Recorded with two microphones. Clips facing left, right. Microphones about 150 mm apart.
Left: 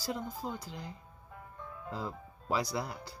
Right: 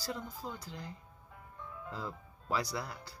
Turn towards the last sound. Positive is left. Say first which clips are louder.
# left 3 dB
turn(degrees=15)  # may be behind; listen again after turning